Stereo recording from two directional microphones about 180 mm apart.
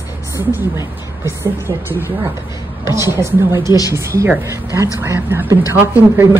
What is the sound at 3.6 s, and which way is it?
Speech, 20° left (ahead or behind).